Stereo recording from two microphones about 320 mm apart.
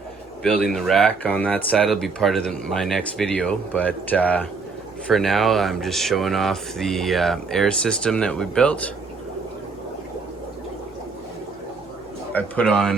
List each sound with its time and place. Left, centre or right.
0.4 s speech: centre
12.3 s speech: centre